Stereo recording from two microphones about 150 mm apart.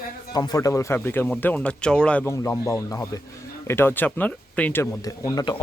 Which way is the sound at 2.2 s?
15° left (ahead or behind).